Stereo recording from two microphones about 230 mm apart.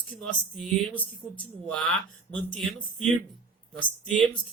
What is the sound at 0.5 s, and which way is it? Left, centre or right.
Speech, centre.